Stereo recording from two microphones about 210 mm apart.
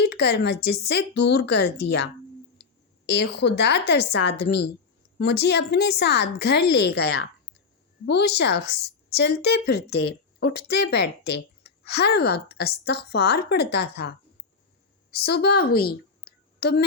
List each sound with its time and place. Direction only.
0.0 s a woman's voice: 50° left (ahead or behind)
3.1 s a woman's voice: 55° left (ahead or behind)